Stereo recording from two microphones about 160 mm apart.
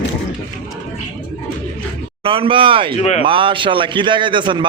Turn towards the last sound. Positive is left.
turn(degrees=-30)  # may be behind; listen again after turning